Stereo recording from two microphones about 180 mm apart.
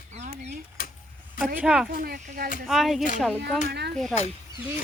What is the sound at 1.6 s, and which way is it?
Speech, 5° right (ahead or behind).